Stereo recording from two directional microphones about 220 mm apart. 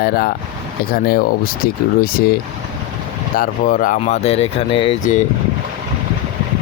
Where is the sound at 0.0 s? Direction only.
40° left (ahead or behind).